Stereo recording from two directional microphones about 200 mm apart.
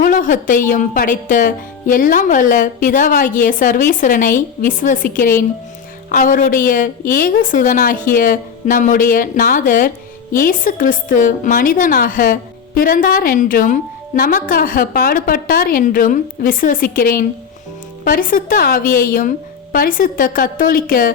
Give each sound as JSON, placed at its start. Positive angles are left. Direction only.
{"t": 0.0, "sound": "a woman's voice", "side_deg": 40}